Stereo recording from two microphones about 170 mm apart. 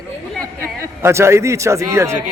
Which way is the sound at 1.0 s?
15° right (ahead or behind).